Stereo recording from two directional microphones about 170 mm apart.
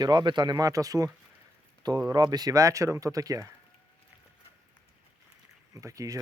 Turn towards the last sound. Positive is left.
turn(degrees=-20)  # may be behind; listen again after turning